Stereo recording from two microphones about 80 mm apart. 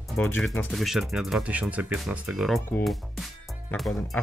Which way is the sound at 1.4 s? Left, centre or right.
Centre.